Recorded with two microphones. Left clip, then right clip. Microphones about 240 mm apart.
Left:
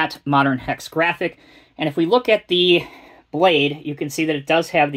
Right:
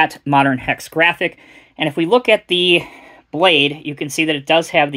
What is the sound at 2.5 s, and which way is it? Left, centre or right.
Speech, right.